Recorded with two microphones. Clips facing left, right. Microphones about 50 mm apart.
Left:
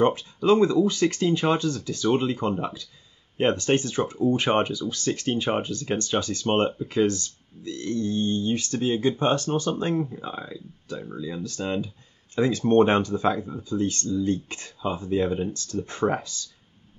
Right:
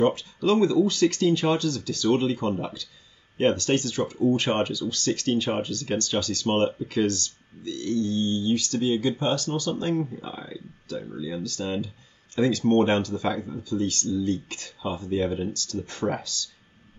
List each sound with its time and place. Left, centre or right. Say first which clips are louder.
0.0 s speech: left 1 dB; left